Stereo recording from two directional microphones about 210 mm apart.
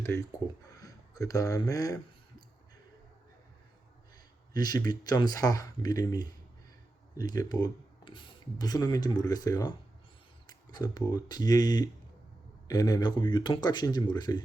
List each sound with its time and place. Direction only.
0.0 s speech: 15° left (ahead or behind)
4.5 s speech: 20° left (ahead or behind)